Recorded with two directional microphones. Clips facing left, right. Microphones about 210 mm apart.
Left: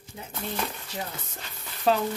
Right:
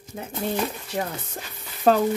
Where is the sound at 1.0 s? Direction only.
65° right (ahead or behind).